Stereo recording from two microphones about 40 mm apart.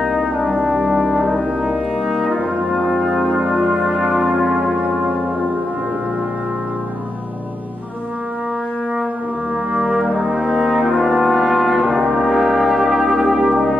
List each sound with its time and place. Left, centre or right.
0.2 s brass instrument: right
0.6 s brass instrument: centre
0.8 s brass instrument: right
1.6 s brass instrument: centre
3.5 s music: centre
9.8 s brass instrument: centre
10.0 s brass instrument: right
10.4 s brass instrument: centre